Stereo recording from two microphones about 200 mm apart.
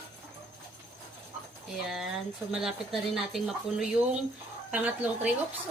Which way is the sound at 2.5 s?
Centre (ahead or behind).